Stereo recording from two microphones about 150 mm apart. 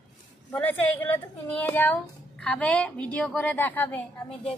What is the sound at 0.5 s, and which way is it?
A woman's voice, 10° left (ahead or behind).